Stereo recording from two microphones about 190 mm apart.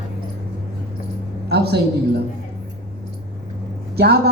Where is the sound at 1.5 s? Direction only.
60° right (ahead or behind).